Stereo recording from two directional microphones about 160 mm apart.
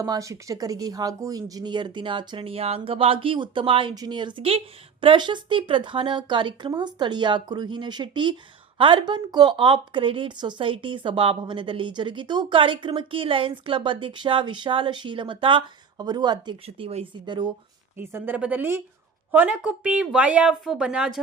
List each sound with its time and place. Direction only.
0.0 s a woman's voice: 20° right (ahead or behind)
16.6 s a woman's voice: 35° right (ahead or behind)
17.9 s speech: 15° right (ahead or behind)